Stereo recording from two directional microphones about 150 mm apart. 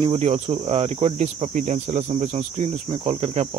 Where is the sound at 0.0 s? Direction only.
40° right (ahead or behind).